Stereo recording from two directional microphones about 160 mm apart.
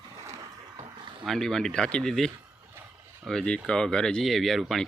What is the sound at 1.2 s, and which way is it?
Speech, centre (ahead or behind).